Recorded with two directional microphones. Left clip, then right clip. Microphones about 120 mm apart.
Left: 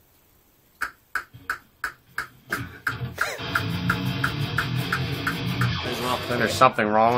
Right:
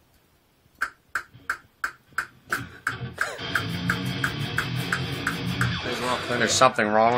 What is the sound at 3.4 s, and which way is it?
Music, centre (ahead or behind).